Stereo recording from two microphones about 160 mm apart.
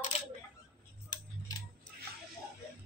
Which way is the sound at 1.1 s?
25° left (ahead or behind).